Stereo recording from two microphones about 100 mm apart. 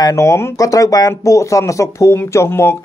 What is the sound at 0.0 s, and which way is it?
Speech, 30° left (ahead or behind).